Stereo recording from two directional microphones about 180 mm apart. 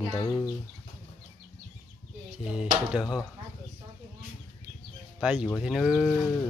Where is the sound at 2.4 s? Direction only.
5° right (ahead or behind).